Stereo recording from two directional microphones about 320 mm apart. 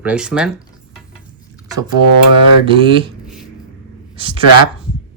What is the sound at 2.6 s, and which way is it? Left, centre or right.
Speech, centre.